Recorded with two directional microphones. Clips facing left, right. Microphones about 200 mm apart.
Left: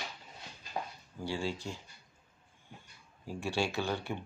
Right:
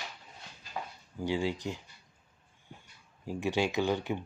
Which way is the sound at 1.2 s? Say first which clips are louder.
Right 5 dB; 15° right (ahead or behind).